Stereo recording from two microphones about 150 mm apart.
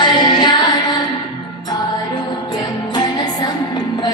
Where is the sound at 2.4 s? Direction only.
30° left (ahead or behind).